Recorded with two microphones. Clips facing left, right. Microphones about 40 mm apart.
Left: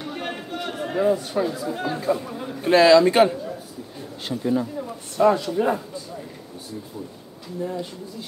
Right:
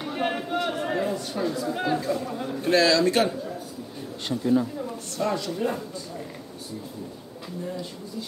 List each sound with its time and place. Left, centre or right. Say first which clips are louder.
0.0 s a sound: right 3 dB; centre
1.0 s speech: left 6 dB; centre
2.7 s speech: left 6 dB; centre
4.3 s speech: even; centre
7.6 s speech: left 6 dB; centre